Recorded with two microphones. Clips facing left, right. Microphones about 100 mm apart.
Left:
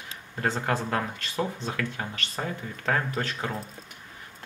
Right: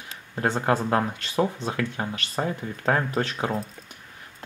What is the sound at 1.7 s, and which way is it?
Speech, 25° right (ahead or behind).